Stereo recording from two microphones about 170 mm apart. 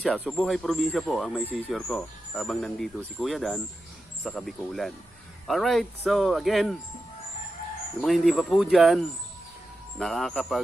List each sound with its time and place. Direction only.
0.0 s speech: centre (ahead or behind)
8.0 s speech: centre (ahead or behind)